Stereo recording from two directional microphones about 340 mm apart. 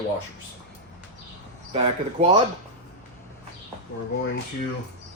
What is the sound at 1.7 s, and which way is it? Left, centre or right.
Speech, centre.